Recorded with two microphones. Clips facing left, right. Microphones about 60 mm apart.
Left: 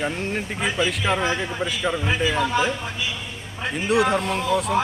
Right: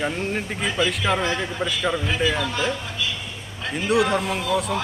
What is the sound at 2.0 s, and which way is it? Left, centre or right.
Speech, centre.